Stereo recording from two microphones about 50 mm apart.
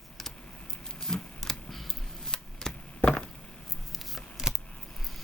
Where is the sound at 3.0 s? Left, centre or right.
Left.